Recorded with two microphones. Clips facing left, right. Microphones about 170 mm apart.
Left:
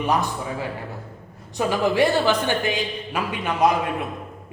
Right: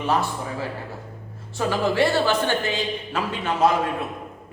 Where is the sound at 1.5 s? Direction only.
15° left (ahead or behind).